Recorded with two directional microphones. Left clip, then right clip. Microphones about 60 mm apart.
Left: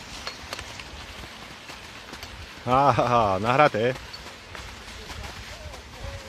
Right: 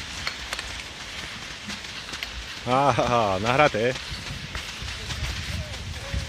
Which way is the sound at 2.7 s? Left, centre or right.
Centre.